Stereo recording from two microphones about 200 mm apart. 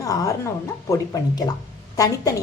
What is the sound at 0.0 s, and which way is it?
A woman's voice, 15° left (ahead or behind).